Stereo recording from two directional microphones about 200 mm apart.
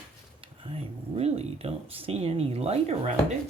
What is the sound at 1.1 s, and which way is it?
Speech, 30° right (ahead or behind).